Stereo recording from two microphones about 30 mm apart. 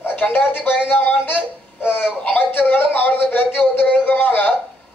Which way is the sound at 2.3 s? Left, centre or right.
Left.